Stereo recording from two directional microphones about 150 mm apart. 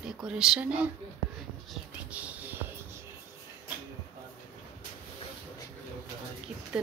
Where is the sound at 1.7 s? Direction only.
10° right (ahead or behind).